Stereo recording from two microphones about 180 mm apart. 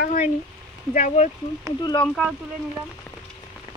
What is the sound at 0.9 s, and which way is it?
Speech, 40° left (ahead or behind).